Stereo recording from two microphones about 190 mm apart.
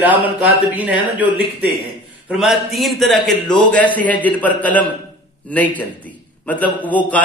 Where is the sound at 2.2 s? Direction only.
Centre (ahead or behind).